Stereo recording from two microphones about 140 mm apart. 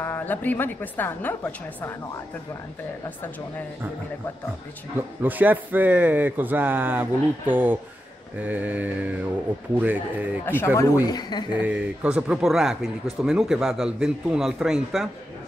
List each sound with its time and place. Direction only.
0.0 s a woman's voice: 15° left (ahead or behind)
5.2 s speech: 15° right (ahead or behind)
10.4 s a woman's voice: 15° left (ahead or behind)
11.1 s speech: 30° left (ahead or behind)
11.6 s speech: 10° right (ahead or behind)